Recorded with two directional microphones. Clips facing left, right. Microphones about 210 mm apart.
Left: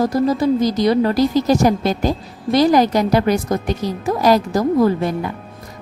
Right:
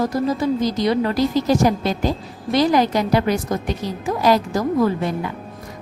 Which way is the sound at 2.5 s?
40° left (ahead or behind).